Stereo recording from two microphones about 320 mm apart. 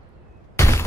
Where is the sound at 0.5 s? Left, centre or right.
Centre.